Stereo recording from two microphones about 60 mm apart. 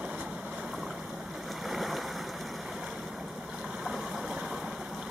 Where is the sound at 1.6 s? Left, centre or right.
Centre.